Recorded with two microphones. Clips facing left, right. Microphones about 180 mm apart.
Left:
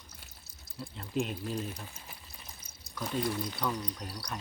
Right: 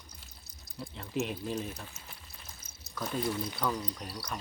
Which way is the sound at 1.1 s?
Centre (ahead or behind).